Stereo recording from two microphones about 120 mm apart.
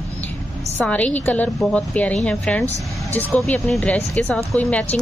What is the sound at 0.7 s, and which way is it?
A woman's voice, 10° left (ahead or behind).